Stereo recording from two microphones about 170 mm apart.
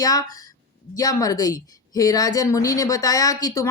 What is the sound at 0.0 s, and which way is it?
A woman's voice, 20° left (ahead or behind).